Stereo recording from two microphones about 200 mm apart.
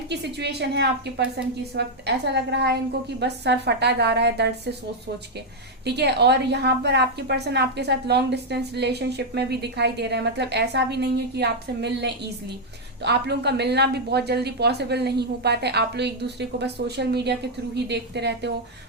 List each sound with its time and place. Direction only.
0.1 s a woman's voice: 55° right (ahead or behind)
5.8 s a woman's voice: 55° right (ahead or behind)